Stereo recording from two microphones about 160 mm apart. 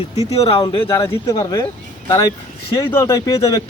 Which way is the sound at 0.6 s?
25° left (ahead or behind).